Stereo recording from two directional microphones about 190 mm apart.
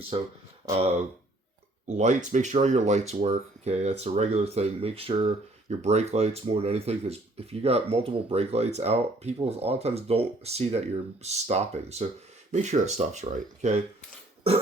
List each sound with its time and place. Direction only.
0.1 s speech: 25° right (ahead or behind)
2.0 s speech: 40° right (ahead or behind)